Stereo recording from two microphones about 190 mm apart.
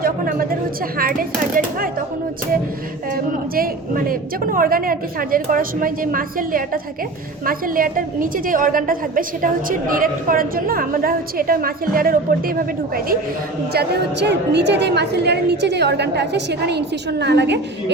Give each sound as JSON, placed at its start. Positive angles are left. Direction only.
{"t": 0.0, "sound": "speech", "side_deg": -50}
{"t": 3.5, "sound": "a woman's voice", "side_deg": -50}
{"t": 13.7, "sound": "a woman's voice", "side_deg": -60}